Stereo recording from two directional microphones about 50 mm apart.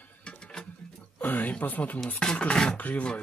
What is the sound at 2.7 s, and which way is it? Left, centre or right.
Speech, left.